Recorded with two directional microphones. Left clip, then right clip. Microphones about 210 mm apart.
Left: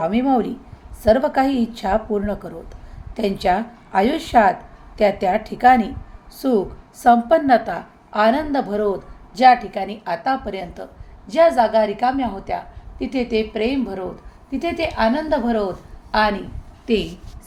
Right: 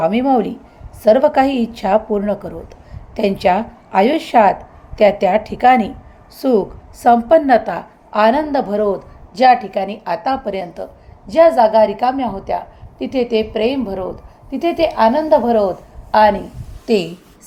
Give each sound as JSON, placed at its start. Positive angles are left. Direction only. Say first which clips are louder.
{"t": 0.0, "sound": "a woman's voice", "louder": "right 4 dB", "side_deg": -15}
{"t": 16.8, "sound": "a woman's voice", "louder": "right 5 dB", "side_deg": -25}